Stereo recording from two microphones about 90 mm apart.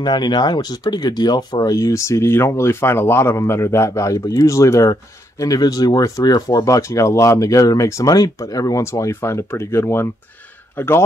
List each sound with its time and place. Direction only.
0.0 s a man's voice: 55° left (ahead or behind); by 10.9 s 25° left (ahead or behind)